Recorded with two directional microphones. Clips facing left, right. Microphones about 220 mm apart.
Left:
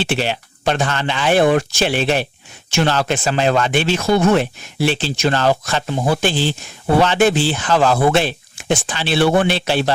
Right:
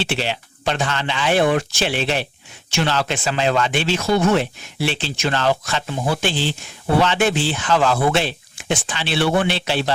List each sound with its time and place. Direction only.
0.0 s speech: 50° left (ahead or behind)